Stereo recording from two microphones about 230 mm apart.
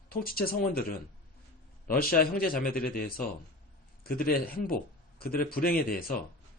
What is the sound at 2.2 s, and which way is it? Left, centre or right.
Speech, left.